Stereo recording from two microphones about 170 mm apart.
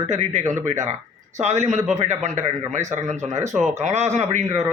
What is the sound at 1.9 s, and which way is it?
A man's voice, 45° right (ahead or behind).